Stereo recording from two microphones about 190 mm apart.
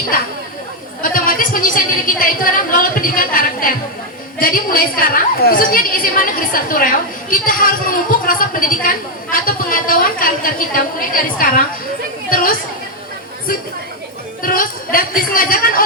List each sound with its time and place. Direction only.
1.1 s a woman's voice: 45° left (ahead or behind)
14.4 s a woman's voice: 50° left (ahead or behind)